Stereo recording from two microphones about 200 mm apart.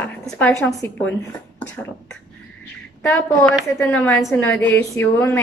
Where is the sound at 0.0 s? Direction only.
5° left (ahead or behind).